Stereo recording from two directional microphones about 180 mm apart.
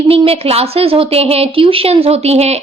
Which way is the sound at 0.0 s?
30° right (ahead or behind).